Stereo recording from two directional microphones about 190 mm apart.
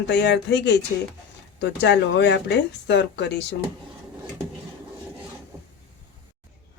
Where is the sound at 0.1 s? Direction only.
65° left (ahead or behind).